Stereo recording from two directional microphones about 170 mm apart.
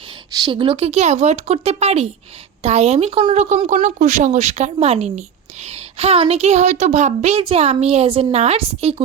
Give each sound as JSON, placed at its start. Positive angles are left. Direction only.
{"t": 0.3, "sound": "a woman's voice", "side_deg": -25}